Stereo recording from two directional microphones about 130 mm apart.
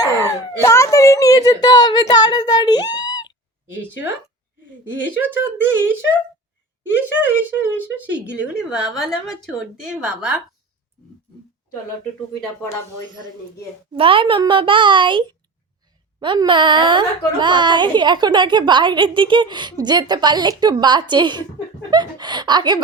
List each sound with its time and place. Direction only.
0.6 s a sound: 25° left (ahead or behind)
5.2 s speech: 15° right (ahead or behind)
13.9 s a woman's voice: 40° right (ahead or behind)
16.2 s a woman's voice: 40° right (ahead or behind)